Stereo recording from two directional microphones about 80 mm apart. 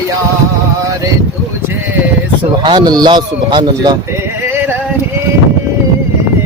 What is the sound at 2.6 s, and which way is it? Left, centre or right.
Speech, right.